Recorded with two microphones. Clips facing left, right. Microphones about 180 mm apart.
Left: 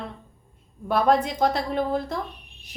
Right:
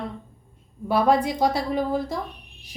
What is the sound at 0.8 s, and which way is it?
Speech, 10° right (ahead or behind).